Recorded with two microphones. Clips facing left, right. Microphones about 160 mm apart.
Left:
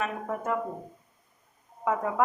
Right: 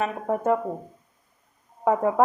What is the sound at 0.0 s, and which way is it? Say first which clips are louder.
Speech: right 6 dB; 30° right (ahead or behind).